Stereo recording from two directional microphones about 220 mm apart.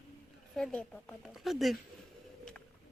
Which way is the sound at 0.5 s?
5° left (ahead or behind).